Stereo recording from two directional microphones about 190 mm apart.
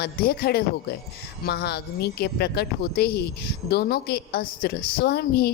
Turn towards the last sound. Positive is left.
turn(degrees=55)  # may be behind; listen again after turning